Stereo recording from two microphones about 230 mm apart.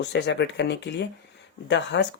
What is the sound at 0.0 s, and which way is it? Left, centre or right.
Speech, left.